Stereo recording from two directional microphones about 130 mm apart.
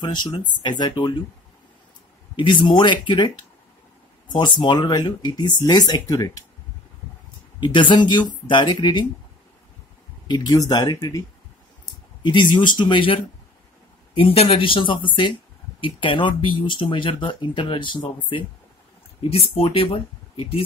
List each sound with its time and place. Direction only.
0.0 s speech: 35° left (ahead or behind)
2.3 s speech: 35° left (ahead or behind)
7.6 s speech: 40° left (ahead or behind)
10.2 s speech: 30° left (ahead or behind)
14.2 s speech: 45° left (ahead or behind)